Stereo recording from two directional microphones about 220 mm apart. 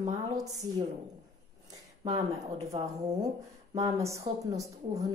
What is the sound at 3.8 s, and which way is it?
Speech, 15° right (ahead or behind).